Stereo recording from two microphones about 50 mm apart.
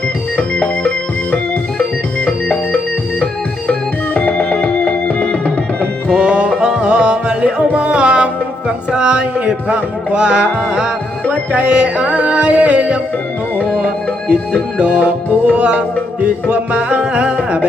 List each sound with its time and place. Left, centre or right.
1.8 s music: left
6.1 s music: centre